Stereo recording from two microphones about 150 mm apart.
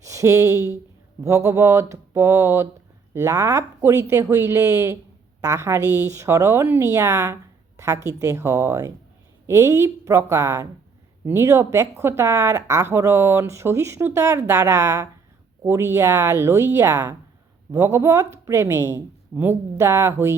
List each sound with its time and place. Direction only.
0.0 s speech: 20° right (ahead or behind)